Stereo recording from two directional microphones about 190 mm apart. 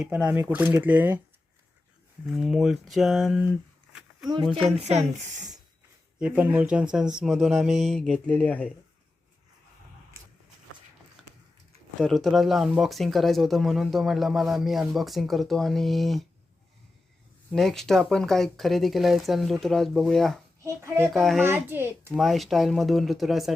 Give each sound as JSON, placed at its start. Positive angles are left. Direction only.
{"t": 0.0, "sound": "speech", "side_deg": -5}
{"t": 2.2, "sound": "speech", "side_deg": 0}
{"t": 4.8, "sound": "speech", "side_deg": -35}
{"t": 6.1, "sound": "speech", "side_deg": -5}
{"t": 11.9, "sound": "speech", "side_deg": 0}
{"t": 17.5, "sound": "speech", "side_deg": 0}
{"t": 20.6, "sound": "a child's voice", "side_deg": -15}
{"t": 21.0, "sound": "speech", "side_deg": 0}
{"t": 21.4, "sound": "speech", "side_deg": -10}
{"t": 22.1, "sound": "speech", "side_deg": 0}